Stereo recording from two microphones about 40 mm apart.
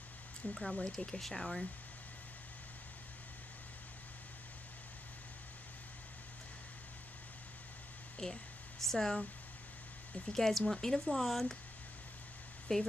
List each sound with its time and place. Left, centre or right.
0.6 s speech: centre
8.2 s a sound: centre
10.2 s speech: centre
12.7 s a woman's voice: left